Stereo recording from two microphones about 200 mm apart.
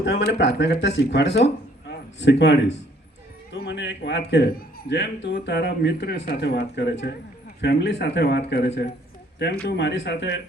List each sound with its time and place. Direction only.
0.0 s a man's voice: 55° left (ahead or behind)